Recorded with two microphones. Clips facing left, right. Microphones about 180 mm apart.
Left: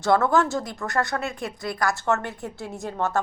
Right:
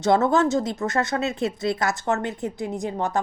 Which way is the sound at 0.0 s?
20° right (ahead or behind).